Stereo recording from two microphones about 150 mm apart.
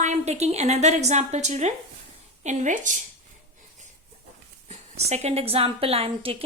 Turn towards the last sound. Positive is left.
turn(degrees=-40)  # may be behind; listen again after turning